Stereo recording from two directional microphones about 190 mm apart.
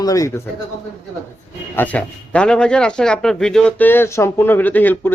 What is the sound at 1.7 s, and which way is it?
Speech, 10° left (ahead or behind).